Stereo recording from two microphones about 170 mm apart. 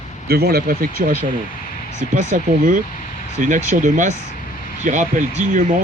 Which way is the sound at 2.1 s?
45° right (ahead or behind).